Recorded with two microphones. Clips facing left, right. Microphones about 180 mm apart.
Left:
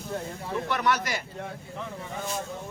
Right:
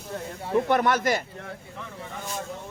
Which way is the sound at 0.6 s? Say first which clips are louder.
Right 3 dB; 50° right (ahead or behind).